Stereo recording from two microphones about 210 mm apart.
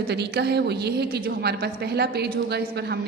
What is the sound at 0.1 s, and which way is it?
A woman's voice, 50° right (ahead or behind).